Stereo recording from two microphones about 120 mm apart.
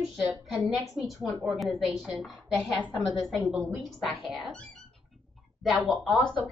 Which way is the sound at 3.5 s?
Centre (ahead or behind).